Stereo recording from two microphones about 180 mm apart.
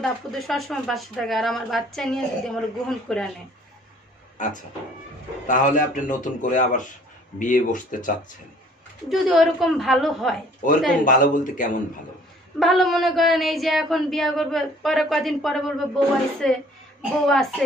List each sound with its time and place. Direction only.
0.0 s speech: centre (ahead or behind)
4.4 s a man's voice: 45° left (ahead or behind)
9.1 s speech: centre (ahead or behind)
11.1 s a man's voice: 50° left (ahead or behind)
12.5 s speech: centre (ahead or behind)